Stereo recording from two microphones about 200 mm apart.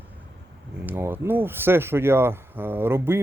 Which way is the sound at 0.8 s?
10° right (ahead or behind).